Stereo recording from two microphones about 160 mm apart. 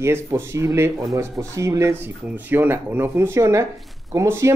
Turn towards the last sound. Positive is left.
turn(degrees=-15)  # may be behind; listen again after turning